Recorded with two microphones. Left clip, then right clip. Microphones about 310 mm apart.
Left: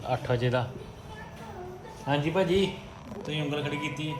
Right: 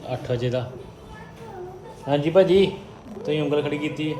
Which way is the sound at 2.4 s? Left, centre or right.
Right.